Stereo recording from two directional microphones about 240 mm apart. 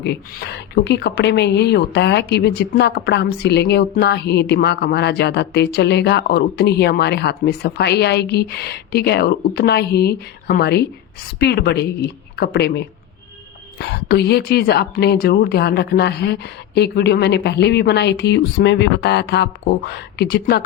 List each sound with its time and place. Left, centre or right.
0.0 s a woman's voice: left